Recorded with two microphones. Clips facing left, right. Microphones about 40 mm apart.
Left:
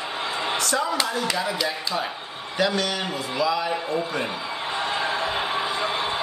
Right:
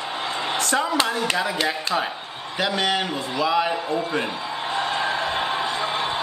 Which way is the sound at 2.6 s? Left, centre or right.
Right.